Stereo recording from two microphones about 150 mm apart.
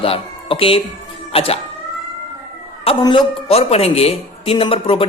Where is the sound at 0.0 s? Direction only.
40° left (ahead or behind).